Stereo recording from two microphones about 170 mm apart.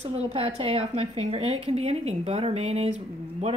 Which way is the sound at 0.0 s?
40° right (ahead or behind).